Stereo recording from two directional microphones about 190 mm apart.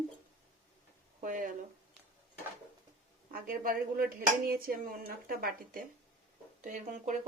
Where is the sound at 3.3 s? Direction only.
50° right (ahead or behind).